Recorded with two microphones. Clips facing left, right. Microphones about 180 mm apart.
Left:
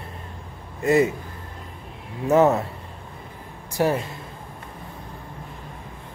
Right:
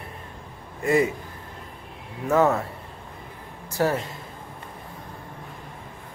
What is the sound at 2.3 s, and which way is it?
Speech, 20° left (ahead or behind).